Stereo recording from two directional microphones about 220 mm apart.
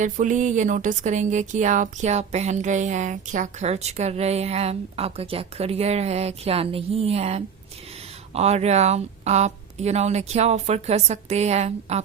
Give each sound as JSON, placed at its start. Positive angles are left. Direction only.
{"t": 0.0, "sound": "speech", "side_deg": -35}